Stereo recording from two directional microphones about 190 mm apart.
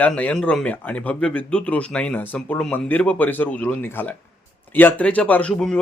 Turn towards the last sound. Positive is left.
turn(degrees=5)  # may be behind; listen again after turning